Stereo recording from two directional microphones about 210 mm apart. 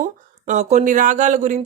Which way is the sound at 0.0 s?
35° right (ahead or behind).